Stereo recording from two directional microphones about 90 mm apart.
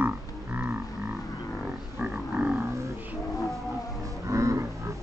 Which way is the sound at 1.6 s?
15° right (ahead or behind).